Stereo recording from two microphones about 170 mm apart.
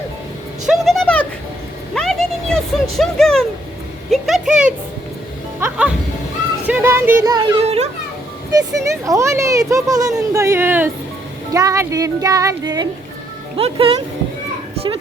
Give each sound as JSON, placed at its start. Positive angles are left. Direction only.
{"t": 0.6, "sound": "a sound", "side_deg": 0}
{"t": 5.5, "sound": "music", "side_deg": -10}
{"t": 6.7, "sound": "speech", "side_deg": -15}
{"t": 7.6, "sound": "a child's voice", "side_deg": -40}
{"t": 8.7, "sound": "speech", "side_deg": -20}
{"t": 13.6, "sound": "speech", "side_deg": -35}